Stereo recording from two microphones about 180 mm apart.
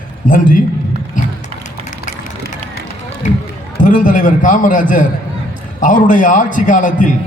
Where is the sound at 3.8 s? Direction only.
45° left (ahead or behind).